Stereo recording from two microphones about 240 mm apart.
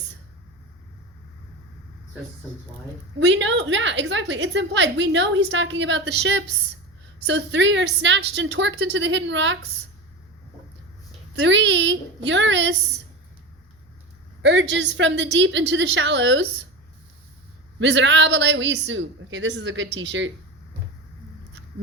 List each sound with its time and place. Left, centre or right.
3.2 s a woman's voice: right
11.3 s a woman's voice: right
14.4 s a woman's voice: right
17.7 s a woman's voice: right